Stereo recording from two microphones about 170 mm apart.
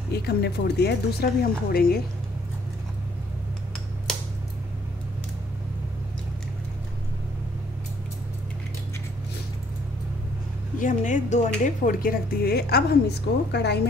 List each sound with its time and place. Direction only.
0.1 s speech: 70° left (ahead or behind)
10.8 s speech: 50° left (ahead or behind); by 13.0 s 65° left (ahead or behind)
13.5 s speech: 80° left